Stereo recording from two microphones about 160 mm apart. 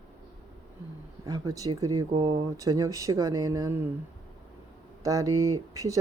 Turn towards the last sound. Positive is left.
turn(degrees=-20)  # may be behind; listen again after turning